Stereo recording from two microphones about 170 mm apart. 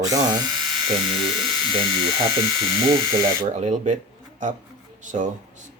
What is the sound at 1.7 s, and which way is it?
Speech, 30° right (ahead or behind).